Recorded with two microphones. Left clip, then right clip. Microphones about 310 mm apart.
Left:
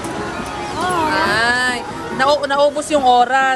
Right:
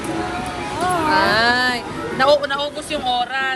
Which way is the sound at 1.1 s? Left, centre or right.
Centre.